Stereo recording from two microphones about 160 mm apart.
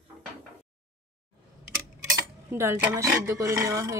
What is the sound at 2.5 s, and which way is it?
Speech, 15° right (ahead or behind).